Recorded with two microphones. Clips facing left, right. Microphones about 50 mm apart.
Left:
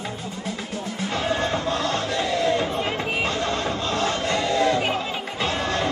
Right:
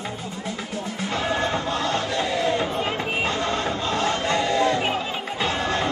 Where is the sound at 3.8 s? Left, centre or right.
Centre.